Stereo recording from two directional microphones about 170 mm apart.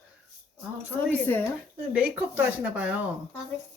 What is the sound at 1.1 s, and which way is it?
Speech, 10° left (ahead or behind).